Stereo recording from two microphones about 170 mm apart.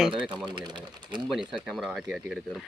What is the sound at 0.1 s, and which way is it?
Speech, 30° right (ahead or behind).